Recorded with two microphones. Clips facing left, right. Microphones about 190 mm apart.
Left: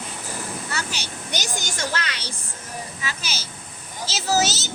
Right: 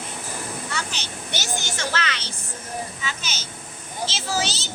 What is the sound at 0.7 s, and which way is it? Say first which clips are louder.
Speech: left 1 dB; 10° left (ahead or behind).